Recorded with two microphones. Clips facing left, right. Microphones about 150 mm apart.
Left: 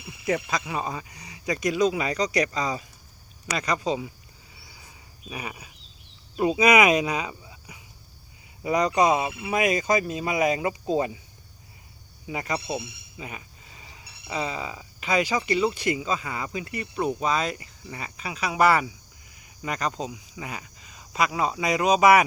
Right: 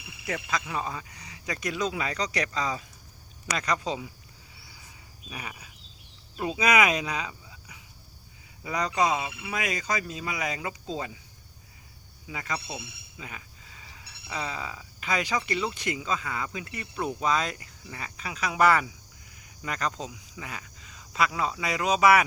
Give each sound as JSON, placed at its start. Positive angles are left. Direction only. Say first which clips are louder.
{"t": 0.3, "sound": "speech", "louder": "left 5 dB", "side_deg": 20}
{"t": 5.3, "sound": "speech", "louder": "left 4 dB", "side_deg": 15}
{"t": 12.3, "sound": "speech", "louder": "left 6 dB", "side_deg": 20}